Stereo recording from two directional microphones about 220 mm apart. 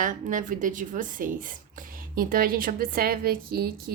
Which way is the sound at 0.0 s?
35° right (ahead or behind).